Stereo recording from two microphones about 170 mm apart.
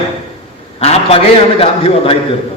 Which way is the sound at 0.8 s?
35° left (ahead or behind).